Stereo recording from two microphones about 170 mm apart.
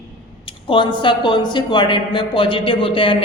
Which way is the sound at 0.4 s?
30° left (ahead or behind).